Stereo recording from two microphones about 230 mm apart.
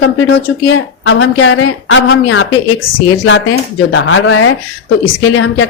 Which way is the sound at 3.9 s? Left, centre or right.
Left.